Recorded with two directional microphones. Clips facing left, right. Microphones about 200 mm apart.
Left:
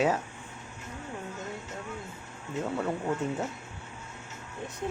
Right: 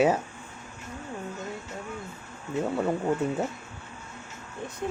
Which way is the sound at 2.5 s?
15° right (ahead or behind).